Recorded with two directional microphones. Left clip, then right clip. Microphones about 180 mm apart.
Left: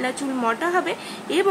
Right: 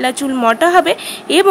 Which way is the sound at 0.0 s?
55° right (ahead or behind).